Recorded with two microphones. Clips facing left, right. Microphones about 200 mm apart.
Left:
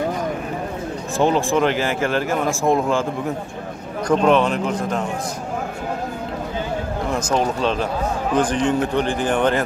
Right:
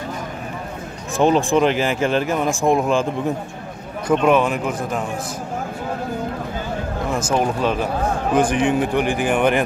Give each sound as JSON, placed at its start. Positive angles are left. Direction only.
{"t": 1.1, "sound": "speech", "side_deg": -15}
{"t": 4.1, "sound": "speech", "side_deg": -5}
{"t": 7.2, "sound": "speech", "side_deg": -5}